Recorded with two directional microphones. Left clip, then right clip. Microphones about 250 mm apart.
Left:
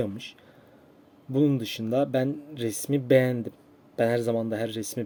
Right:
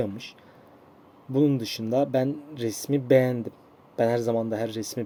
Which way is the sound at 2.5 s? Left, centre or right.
Right.